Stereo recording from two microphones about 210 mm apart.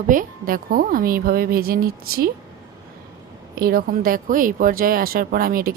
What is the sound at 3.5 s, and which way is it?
Speech, 45° right (ahead or behind).